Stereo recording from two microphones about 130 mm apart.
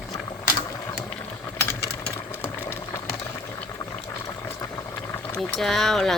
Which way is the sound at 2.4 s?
15° left (ahead or behind).